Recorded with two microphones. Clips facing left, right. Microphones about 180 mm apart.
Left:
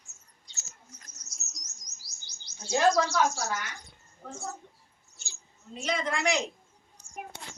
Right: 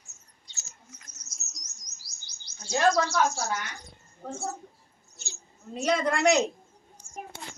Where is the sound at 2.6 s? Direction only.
15° left (ahead or behind).